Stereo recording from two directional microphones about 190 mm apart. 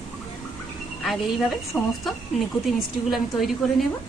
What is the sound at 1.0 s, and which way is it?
Speech, centre (ahead or behind).